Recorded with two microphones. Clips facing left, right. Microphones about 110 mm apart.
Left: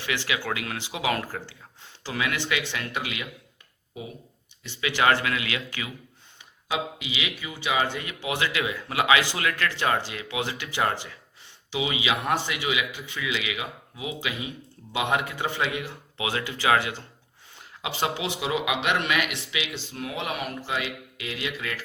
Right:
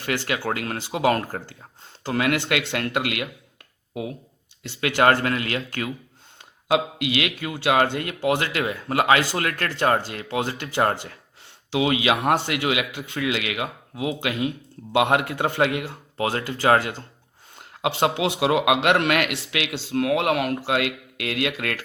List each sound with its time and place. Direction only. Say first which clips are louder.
0.0 s a man's voice: right 4 dB; 50° right (ahead or behind)
4.8 s speech: right 4 dB; 55° right (ahead or behind)
6.4 s speech: right 8 dB; 65° right (ahead or behind); by 11.2 s 45° right (ahead or behind)
11.7 s a man's voice: right 6 dB; 60° right (ahead or behind); by 17.1 s 45° right (ahead or behind)
17.6 s a sound: right 7 dB; 60° right (ahead or behind)
18.2 s speech: right 7 dB; 65° right (ahead or behind)